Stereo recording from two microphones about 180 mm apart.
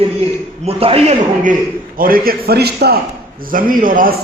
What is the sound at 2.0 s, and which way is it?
Speech, 55° right (ahead or behind).